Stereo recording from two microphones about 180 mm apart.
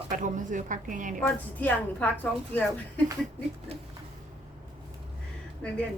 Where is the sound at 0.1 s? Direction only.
45° right (ahead or behind).